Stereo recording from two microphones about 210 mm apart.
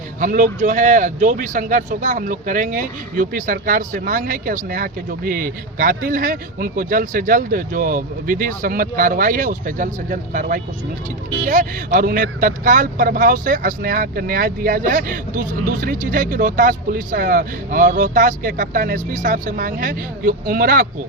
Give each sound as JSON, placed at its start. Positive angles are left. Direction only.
{"t": 0.2, "sound": "speech", "side_deg": -40}